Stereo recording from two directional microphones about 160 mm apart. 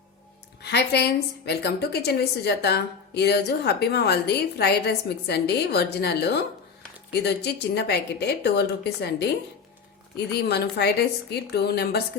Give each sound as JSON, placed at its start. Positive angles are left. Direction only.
{"t": 0.6, "sound": "a woman's voice", "side_deg": 90}